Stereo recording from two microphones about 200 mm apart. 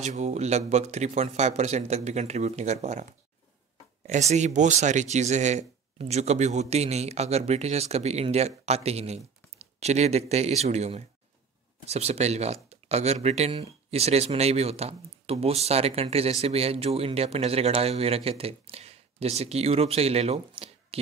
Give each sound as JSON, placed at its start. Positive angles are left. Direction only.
{"t": 0.0, "sound": "speech", "side_deg": -35}
{"t": 4.1, "sound": "speech", "side_deg": -35}